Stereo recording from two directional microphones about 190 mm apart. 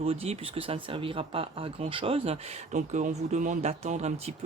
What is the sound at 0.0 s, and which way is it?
Speech, 30° right (ahead or behind).